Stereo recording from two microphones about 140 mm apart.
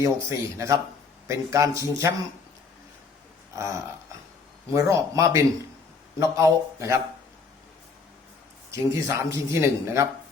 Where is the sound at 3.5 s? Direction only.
20° right (ahead or behind).